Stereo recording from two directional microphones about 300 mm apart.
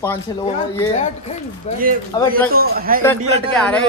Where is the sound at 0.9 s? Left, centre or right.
Left.